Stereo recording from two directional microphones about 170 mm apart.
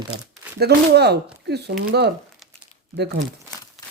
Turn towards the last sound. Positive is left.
turn(degrees=-75)  # may be behind; listen again after turning